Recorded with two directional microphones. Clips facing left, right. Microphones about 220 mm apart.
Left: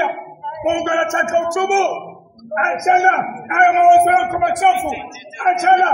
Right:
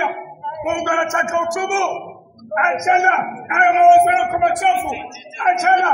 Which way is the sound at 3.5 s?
45° left (ahead or behind).